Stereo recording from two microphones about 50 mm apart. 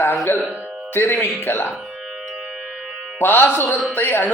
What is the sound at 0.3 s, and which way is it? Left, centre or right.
Music, left.